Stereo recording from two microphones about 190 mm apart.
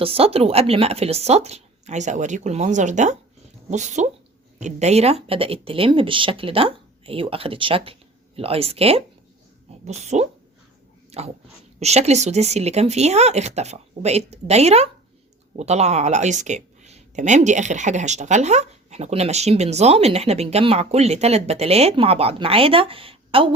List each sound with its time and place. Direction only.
0.0 s speech: 30° right (ahead or behind)
11.1 s a sound: 35° right (ahead or behind)
11.8 s speech: 35° right (ahead or behind)